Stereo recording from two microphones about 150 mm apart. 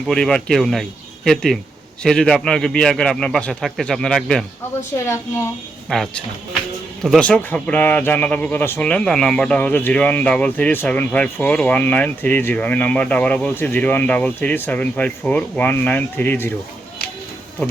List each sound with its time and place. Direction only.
0.1 s a man's voice: 5° left (ahead or behind)
5.9 s a man's voice: 5° left (ahead or behind)